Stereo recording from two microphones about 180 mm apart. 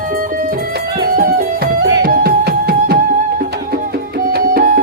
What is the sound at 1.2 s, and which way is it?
Music, 50° right (ahead or behind).